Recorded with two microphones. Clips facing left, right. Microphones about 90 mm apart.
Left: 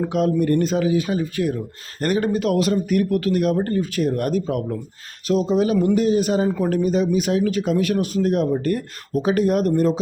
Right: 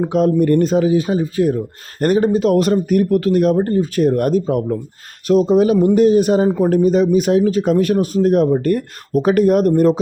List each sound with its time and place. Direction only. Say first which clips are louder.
0.1 s speech: right 6 dB; 40° right (ahead or behind)
3.9 s speech: right 8 dB; 40° right (ahead or behind)